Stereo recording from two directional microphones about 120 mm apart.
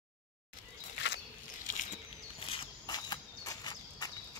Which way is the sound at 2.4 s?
50° left (ahead or behind).